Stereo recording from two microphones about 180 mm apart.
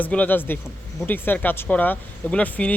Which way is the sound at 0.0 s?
10° left (ahead or behind).